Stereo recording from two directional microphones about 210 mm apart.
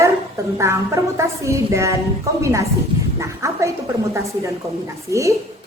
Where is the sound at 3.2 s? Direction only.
15° right (ahead or behind).